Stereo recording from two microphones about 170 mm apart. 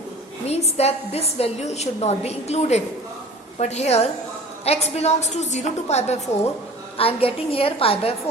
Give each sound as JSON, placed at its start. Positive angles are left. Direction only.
{"t": 0.4, "sound": "a woman's voice", "side_deg": 40}